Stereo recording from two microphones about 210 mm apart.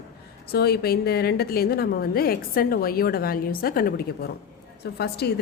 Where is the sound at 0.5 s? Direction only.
50° left (ahead or behind).